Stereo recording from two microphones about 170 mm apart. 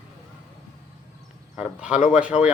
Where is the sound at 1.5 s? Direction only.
5° right (ahead or behind).